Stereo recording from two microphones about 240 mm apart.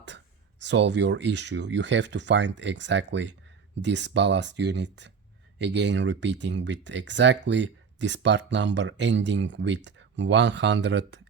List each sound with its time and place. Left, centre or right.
0.6 s speech: right